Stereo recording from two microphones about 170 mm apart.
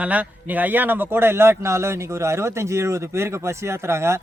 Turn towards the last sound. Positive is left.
turn(degrees=-15)  # may be behind; listen again after turning